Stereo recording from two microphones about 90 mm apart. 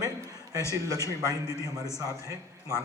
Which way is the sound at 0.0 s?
40° right (ahead or behind).